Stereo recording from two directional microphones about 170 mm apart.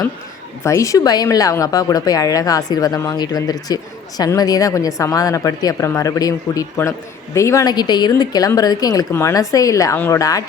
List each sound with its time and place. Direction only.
0.6 s a woman's voice: 20° left (ahead or behind)